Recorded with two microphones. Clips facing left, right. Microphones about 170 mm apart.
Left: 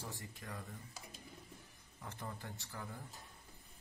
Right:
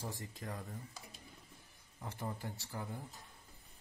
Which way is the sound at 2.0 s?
25° right (ahead or behind).